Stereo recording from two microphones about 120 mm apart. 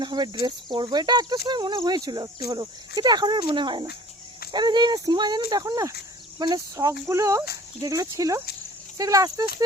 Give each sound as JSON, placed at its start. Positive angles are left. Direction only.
{"t": 0.0, "sound": "speech", "side_deg": -35}